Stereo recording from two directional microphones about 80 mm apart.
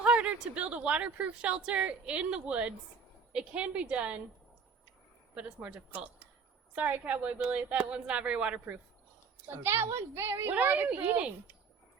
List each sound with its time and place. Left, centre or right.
0.0 s a woman's voice: centre
5.3 s a woman's voice: centre
9.5 s a woman's voice: right